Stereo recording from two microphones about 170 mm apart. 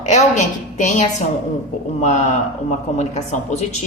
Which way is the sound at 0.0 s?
45° left (ahead or behind).